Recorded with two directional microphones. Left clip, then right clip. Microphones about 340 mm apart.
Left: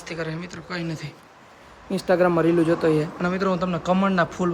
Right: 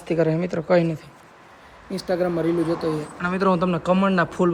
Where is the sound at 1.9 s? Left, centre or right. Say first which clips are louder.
Left 4 dB; centre.